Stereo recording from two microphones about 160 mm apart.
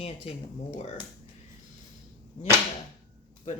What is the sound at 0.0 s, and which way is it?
Speech, 40° left (ahead or behind).